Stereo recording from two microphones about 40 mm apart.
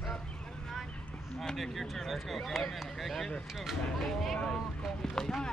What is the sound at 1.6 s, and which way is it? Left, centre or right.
Speech, centre.